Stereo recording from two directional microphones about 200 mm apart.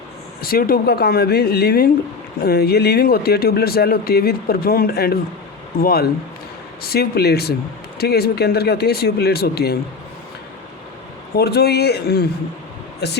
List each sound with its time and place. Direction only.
0.4 s speech: 50° left (ahead or behind)
11.3 s speech: 50° left (ahead or behind)